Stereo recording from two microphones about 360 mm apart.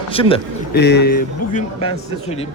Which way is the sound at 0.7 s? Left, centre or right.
Left.